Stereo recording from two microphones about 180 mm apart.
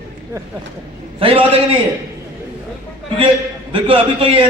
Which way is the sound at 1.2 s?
30° right (ahead or behind).